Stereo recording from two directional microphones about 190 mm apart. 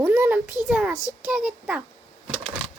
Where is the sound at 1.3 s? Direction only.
5° right (ahead or behind).